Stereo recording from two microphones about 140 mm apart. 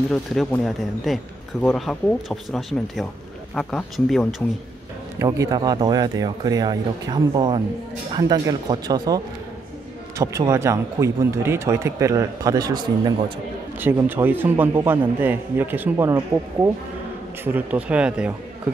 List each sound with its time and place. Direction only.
0.1 s speech: centre (ahead or behind)
5.2 s speech: 25° right (ahead or behind)
13.7 s a man's voice: 15° right (ahead or behind)
17.5 s a man's voice: 10° right (ahead or behind)